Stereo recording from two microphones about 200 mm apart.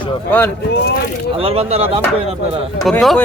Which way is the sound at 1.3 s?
30° right (ahead or behind).